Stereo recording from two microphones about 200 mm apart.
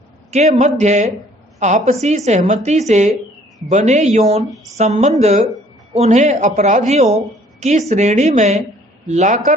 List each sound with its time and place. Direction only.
0.3 s a man's voice: 35° right (ahead or behind)